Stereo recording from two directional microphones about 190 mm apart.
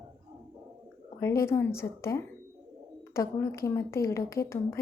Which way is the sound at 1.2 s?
15° left (ahead or behind).